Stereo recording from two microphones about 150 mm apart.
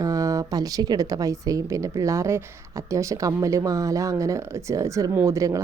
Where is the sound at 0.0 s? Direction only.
20° right (ahead or behind).